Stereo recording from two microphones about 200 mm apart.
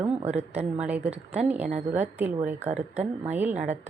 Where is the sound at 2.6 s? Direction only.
35° right (ahead or behind).